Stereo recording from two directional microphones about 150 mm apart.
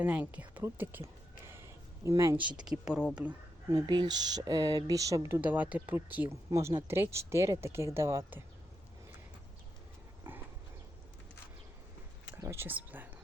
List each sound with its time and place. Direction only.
0.0 s a woman's voice: 10° right (ahead or behind)
2.6 s speech: 5° right (ahead or behind)
3.7 s speech: 25° right (ahead or behind)
10.3 s horse: 15° right (ahead or behind)
12.4 s speech: 15° right (ahead or behind)